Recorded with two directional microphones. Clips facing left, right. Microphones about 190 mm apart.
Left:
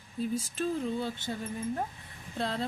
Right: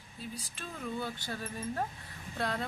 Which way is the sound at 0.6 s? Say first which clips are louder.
Left 6 dB; 30° left (ahead or behind).